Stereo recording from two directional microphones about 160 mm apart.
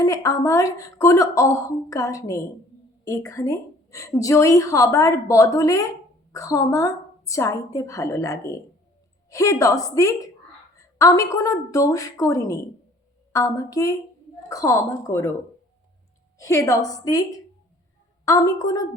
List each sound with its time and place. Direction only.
0.0 s a woman's voice: 20° left (ahead or behind)
16.4 s a woman's voice: 20° left (ahead or behind)